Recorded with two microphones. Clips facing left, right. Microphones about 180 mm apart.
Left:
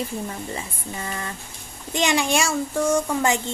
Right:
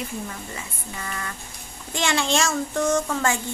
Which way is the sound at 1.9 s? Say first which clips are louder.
Left 2 dB; 15° left (ahead or behind).